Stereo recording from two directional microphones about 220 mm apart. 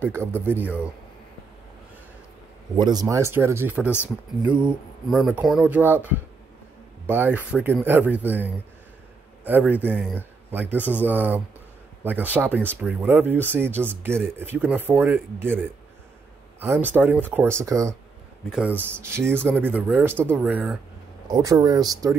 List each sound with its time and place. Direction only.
0.0 s speech: 10° right (ahead or behind)
2.7 s a man's voice: 20° right (ahead or behind)
9.9 s speech: 5° left (ahead or behind)
10.5 s a man's voice: 10° right (ahead or behind)
21.3 s speech: 15° right (ahead or behind)